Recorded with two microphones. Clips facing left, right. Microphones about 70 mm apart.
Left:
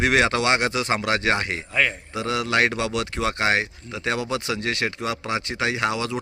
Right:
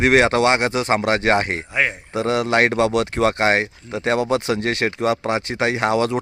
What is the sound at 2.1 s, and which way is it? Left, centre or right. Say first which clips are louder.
A man's voice: right 5 dB; right.